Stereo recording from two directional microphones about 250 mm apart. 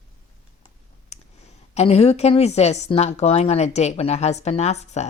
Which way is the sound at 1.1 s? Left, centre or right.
Left.